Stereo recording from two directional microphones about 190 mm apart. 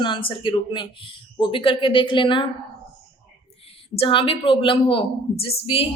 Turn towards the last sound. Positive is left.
turn(degrees=30)  # may be behind; listen again after turning